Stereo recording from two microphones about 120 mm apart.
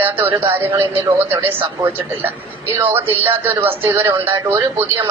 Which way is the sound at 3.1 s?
50° right (ahead or behind).